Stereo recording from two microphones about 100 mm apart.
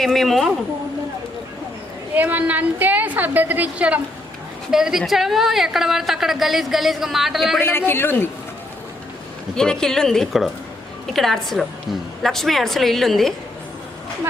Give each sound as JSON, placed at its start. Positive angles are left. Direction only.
{"t": 0.0, "sound": "a woman's voice", "side_deg": 5}
{"t": 2.1, "sound": "a woman's voice", "side_deg": -15}
{"t": 7.6, "sound": "a woman's voice", "side_deg": 25}
{"t": 9.6, "sound": "a woman's voice", "side_deg": 5}